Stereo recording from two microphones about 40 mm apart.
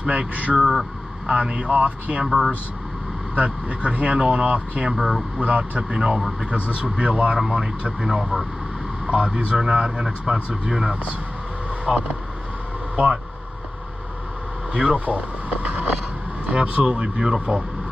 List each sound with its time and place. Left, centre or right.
0.0 s speech: right
0.6 s speech: centre
1.2 s speech: right
2.2 s speech: centre
3.3 s speech: right
4.9 s speech: centre
5.4 s speech: right
5.9 s speech: right
14.7 s speech: right
15.0 s speech: right